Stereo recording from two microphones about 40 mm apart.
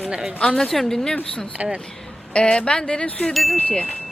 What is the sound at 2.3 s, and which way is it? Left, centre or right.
Speech, left.